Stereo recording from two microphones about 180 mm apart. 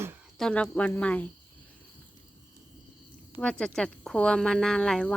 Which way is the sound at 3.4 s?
5° left (ahead or behind).